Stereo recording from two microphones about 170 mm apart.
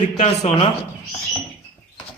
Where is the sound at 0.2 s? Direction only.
40° left (ahead or behind).